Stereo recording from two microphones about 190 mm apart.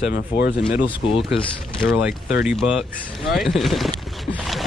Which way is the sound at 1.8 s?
5° right (ahead or behind).